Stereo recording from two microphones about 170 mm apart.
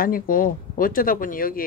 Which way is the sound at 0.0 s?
55° left (ahead or behind).